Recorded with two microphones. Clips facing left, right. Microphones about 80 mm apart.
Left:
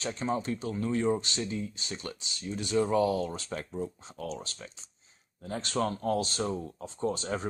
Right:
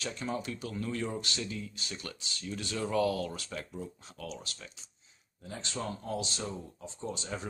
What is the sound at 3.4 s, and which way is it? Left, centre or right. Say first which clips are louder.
Speech: left 5 dB; left.